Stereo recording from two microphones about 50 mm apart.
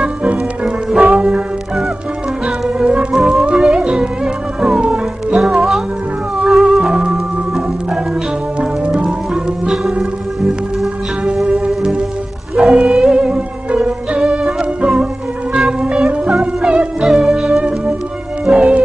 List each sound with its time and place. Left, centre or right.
0.0 s music: right
2.4 s music: centre
3.2 s music: centre; by 9.1 s right
9.3 s music: centre
11.4 s music: centre